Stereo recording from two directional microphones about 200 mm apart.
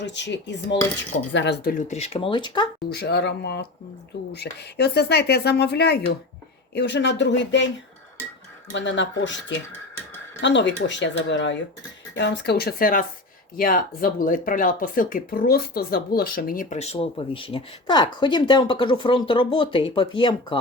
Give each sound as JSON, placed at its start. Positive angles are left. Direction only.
{"t": 0.0, "sound": "speech", "side_deg": 60}
{"t": 1.8, "sound": "speech", "side_deg": 35}
{"t": 2.9, "sound": "speech", "side_deg": 55}
{"t": 8.7, "sound": "speech", "side_deg": 65}